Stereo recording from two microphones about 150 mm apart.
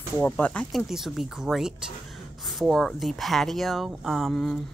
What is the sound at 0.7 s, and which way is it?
Speech, centre (ahead or behind).